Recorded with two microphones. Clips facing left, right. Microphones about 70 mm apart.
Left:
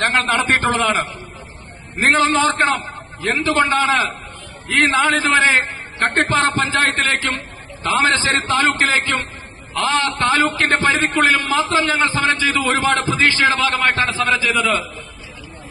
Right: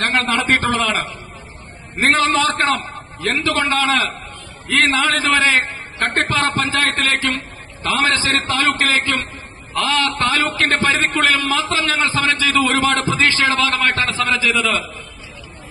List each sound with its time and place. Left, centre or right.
0.0 s a man's voice: left